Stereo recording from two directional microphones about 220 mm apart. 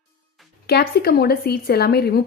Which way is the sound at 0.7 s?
45° left (ahead or behind).